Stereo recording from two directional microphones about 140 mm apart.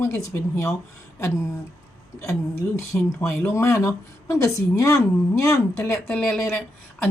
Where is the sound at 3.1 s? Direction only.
20° left (ahead or behind).